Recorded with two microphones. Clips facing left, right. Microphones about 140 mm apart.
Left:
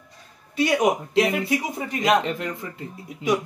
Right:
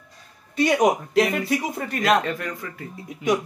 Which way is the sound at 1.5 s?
15° left (ahead or behind).